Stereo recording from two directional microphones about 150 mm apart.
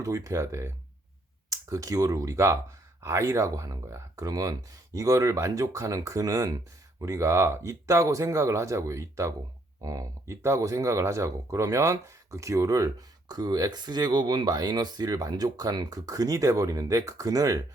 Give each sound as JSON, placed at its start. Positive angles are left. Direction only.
{"t": 0.0, "sound": "speech", "side_deg": -20}